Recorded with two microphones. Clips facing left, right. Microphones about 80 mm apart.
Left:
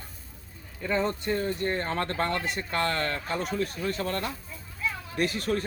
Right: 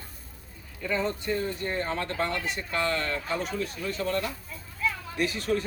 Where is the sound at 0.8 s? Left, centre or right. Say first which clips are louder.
Left 1 dB; left.